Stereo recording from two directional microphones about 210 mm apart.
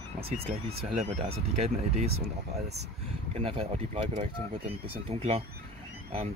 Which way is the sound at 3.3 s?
25° right (ahead or behind).